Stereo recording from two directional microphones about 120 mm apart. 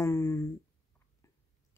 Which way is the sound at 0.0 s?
25° left (ahead or behind).